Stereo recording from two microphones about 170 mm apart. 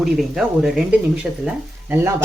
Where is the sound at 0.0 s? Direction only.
Centre (ahead or behind).